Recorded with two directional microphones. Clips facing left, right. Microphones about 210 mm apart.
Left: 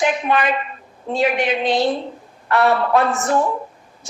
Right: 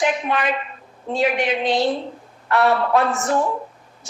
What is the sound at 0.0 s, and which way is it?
A woman's voice, 60° left (ahead or behind).